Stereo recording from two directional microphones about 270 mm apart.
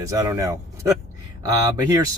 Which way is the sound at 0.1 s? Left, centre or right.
Centre.